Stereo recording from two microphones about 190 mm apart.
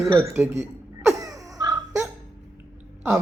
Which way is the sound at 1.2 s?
20° right (ahead or behind).